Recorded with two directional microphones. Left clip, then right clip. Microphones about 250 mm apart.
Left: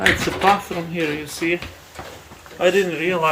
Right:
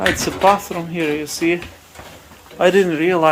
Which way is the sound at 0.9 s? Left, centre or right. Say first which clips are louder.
Right 4 dB; centre.